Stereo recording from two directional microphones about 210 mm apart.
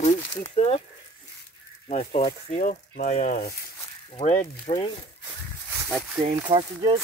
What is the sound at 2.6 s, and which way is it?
Speech, 40° left (ahead or behind).